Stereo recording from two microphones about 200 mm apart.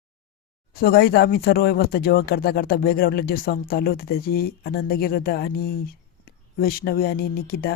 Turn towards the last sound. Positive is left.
turn(degrees=50)  # may be behind; listen again after turning